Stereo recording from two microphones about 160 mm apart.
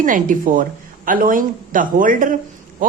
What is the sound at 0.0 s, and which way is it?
Speech, 55° right (ahead or behind).